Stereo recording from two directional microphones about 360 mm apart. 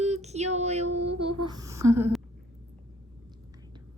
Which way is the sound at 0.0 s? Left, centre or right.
Centre.